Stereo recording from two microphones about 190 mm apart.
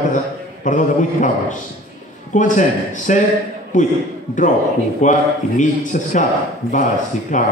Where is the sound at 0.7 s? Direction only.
40° left (ahead or behind).